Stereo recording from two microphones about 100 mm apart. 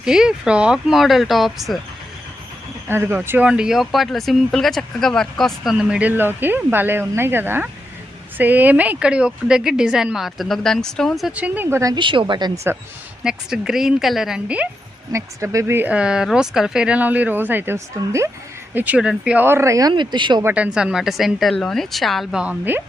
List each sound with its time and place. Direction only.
0.0 s speech: 5° right (ahead or behind)
2.9 s speech: 25° right (ahead or behind); by 5.7 s centre (ahead or behind)
5.7 s speech: 10° right (ahead or behind)
11.3 s speech: 15° right (ahead or behind)
11.9 s a woman's voice: 55° right (ahead or behind)
12.7 s speech: 25° right (ahead or behind)
13.2 s speech: 5° right (ahead or behind)
15.1 s speech: 30° right (ahead or behind)
15.9 s speech: 10° right (ahead or behind); by 18.3 s 30° right (ahead or behind)
18.7 s speech: 20° right (ahead or behind)
18.9 s speech: 10° right (ahead or behind)
19.4 s speech: 25° right (ahead or behind)
19.9 s a woman's voice: 50° right (ahead or behind)
20.4 s speech: 15° right (ahead or behind)